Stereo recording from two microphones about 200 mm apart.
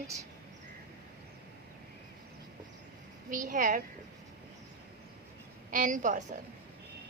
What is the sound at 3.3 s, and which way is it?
Speech, 40° right (ahead or behind).